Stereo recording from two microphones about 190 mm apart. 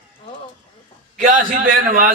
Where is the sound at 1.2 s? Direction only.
45° right (ahead or behind).